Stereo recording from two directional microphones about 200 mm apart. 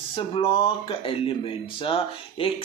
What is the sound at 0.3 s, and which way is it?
Speech, 25° left (ahead or behind).